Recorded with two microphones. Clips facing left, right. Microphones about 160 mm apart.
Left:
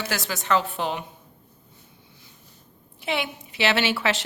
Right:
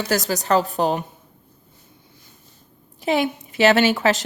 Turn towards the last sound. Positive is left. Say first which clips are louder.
# right 6 dB
turn(degrees=-40)  # may be behind; listen again after turning